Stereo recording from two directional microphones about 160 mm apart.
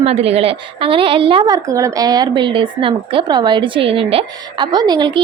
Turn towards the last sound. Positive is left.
turn(degrees=-30)  # may be behind; listen again after turning